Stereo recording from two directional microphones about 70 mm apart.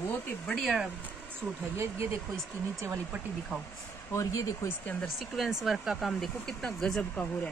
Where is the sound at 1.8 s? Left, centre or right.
Right.